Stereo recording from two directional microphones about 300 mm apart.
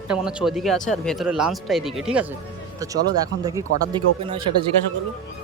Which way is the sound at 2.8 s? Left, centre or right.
Centre.